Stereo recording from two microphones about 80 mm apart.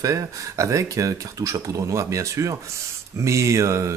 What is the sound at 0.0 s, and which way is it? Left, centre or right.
Speech, right.